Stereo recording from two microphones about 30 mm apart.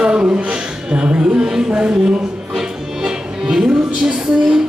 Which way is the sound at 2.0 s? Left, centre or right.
Centre.